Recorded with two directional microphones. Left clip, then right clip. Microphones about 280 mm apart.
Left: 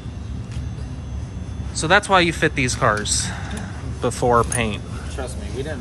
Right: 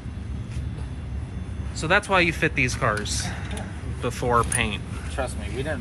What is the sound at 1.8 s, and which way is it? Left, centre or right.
Speech, centre.